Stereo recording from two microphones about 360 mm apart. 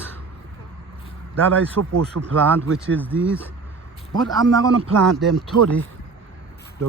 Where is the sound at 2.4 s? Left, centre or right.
Centre.